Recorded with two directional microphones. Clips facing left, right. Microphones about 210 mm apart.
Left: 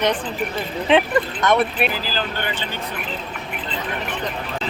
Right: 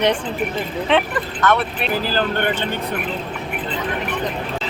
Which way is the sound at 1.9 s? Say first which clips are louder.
Right 6 dB; 55° right (ahead or behind).